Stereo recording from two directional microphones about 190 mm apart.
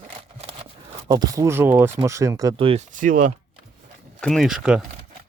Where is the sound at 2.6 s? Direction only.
30° right (ahead or behind).